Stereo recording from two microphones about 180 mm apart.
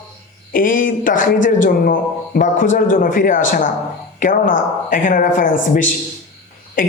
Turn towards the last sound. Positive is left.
turn(degrees=50)  # may be behind; listen again after turning